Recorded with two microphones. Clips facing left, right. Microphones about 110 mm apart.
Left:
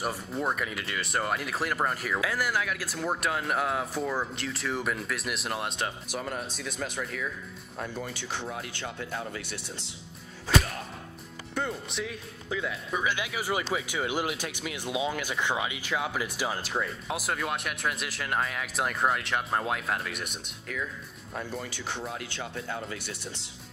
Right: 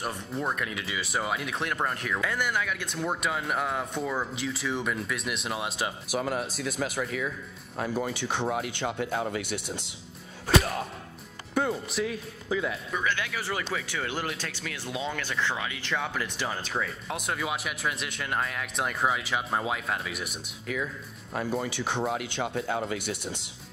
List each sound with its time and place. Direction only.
0.0 s speech: 5° left (ahead or behind)
8.2 s speech: 60° right (ahead or behind)
9.4 s speech: 15° right (ahead or behind)
10.5 s speech: centre (ahead or behind)
13.0 s speech: 15° left (ahead or behind); by 21.5 s 10° right (ahead or behind)
22.9 s speech: 15° right (ahead or behind)